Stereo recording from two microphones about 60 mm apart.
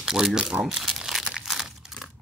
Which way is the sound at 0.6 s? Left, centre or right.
Centre.